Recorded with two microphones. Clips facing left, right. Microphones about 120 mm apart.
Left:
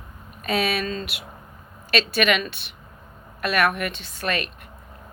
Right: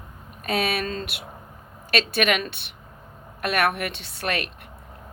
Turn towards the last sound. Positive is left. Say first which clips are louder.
# left 1 dB
turn(degrees=-65)  # may be behind; listen again after turning